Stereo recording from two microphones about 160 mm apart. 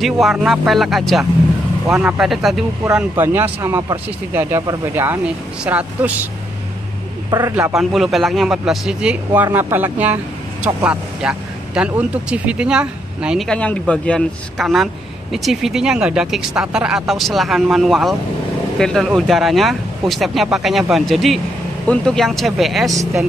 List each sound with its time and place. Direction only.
0.0 s speech: centre (ahead or behind)
1.9 s speech: 15° right (ahead or behind)
2.1 s speech: centre (ahead or behind)
7.2 s a man's voice: 20° right (ahead or behind)
7.7 s speech: centre (ahead or behind)